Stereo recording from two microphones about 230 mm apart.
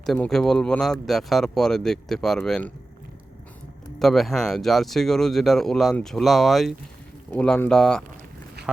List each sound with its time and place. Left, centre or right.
0.0 s speech: centre
4.0 s speech: centre
8.6 s a sound: right